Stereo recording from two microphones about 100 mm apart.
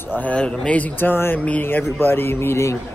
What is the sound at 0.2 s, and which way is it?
Speech, 10° left (ahead or behind).